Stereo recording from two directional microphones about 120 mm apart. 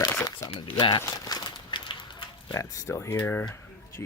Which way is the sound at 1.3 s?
40° left (ahead or behind).